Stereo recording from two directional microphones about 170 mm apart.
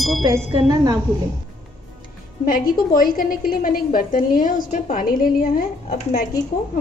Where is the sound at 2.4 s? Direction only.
55° left (ahead or behind).